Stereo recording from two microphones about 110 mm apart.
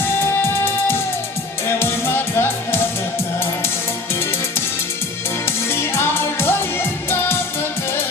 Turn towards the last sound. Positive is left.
turn(degrees=20)  # may be behind; listen again after turning